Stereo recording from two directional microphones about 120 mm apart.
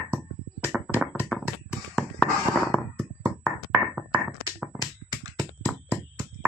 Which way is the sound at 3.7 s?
10° right (ahead or behind).